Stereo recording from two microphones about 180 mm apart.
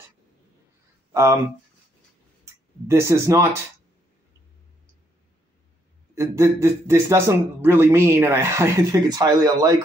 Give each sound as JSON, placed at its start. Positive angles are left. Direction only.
{"t": 1.1, "sound": "speech", "side_deg": -20}
{"t": 2.9, "sound": "speech", "side_deg": -15}
{"t": 6.1, "sound": "speech", "side_deg": -15}